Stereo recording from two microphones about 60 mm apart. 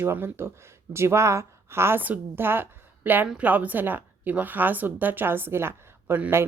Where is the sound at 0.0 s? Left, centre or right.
Right.